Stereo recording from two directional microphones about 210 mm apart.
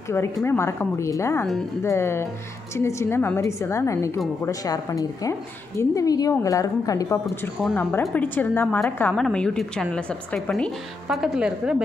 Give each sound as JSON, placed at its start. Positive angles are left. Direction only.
{"t": 0.1, "sound": "a woman's voice", "side_deg": 10}
{"t": 7.2, "sound": "a woman's voice", "side_deg": 5}